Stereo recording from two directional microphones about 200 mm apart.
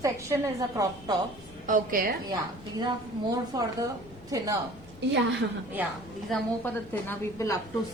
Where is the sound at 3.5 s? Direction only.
15° right (ahead or behind).